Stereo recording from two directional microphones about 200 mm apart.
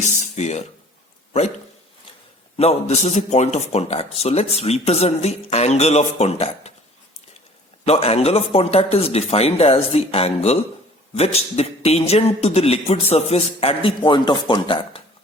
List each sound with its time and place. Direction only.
0.0 s speech: 35° left (ahead or behind)
2.6 s a man's voice: 30° left (ahead or behind)
7.9 s a man's voice: 30° left (ahead or behind)